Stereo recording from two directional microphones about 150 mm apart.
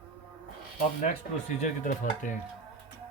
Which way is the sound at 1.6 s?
60° left (ahead or behind).